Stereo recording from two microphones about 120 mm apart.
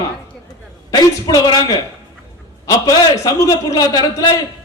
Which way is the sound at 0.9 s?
30° left (ahead or behind).